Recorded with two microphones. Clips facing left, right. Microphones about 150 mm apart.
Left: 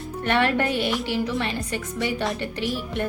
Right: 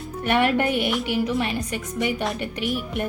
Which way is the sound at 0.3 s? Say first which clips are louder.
Right 1 dB; 15° right (ahead or behind).